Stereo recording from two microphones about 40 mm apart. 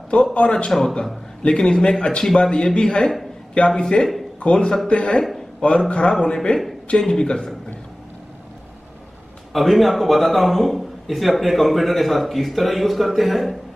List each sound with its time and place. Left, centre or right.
0.1 s a man's voice: left
0.7 s a man's voice: centre
1.4 s a man's voice: left
9.5 s a man's voice: centre